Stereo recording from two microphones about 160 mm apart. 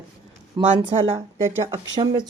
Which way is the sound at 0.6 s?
30° right (ahead or behind).